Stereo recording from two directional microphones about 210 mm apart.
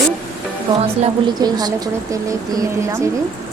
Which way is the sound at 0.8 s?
25° right (ahead or behind).